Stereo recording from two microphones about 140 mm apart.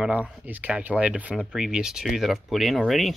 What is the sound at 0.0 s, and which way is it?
Speech, 10° right (ahead or behind).